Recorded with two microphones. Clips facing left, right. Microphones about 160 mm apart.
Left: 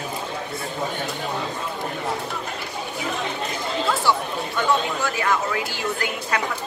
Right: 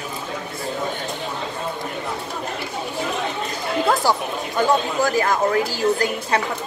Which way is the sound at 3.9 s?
40° right (ahead or behind).